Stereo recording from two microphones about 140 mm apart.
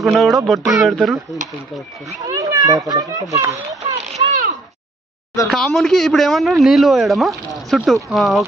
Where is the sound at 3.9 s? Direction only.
70° right (ahead or behind).